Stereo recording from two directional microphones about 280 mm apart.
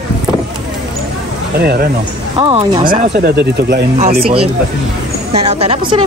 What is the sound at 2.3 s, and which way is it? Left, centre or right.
Speech, centre.